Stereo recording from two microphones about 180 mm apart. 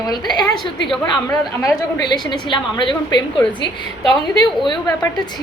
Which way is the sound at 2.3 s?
25° left (ahead or behind).